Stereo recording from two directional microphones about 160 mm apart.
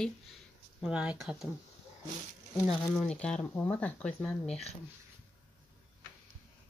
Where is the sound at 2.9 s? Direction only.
5° left (ahead or behind).